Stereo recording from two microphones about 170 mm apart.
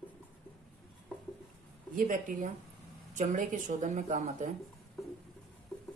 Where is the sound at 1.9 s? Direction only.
50° right (ahead or behind).